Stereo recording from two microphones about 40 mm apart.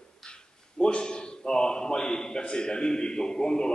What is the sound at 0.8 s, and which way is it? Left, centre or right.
A man's voice, left.